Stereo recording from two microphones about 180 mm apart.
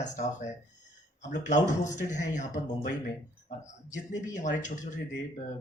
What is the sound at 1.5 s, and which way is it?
Speech, 45° left (ahead or behind).